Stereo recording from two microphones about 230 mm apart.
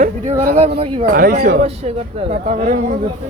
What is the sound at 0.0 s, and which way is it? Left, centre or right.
Speech, right.